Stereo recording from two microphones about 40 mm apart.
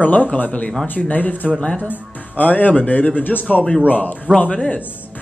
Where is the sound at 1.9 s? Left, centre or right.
Left.